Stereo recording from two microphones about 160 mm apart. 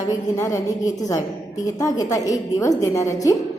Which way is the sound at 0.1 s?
20° left (ahead or behind).